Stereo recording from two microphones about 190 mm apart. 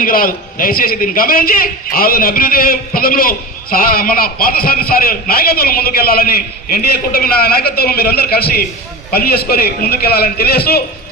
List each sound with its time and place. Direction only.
0.0 s a man's voice: 50° left (ahead or behind)